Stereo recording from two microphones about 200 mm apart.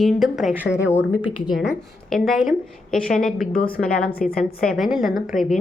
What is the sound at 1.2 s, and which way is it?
Speech, 25° left (ahead or behind).